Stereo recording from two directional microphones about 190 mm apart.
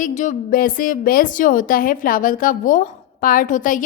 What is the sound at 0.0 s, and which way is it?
A woman's voice, 40° left (ahead or behind).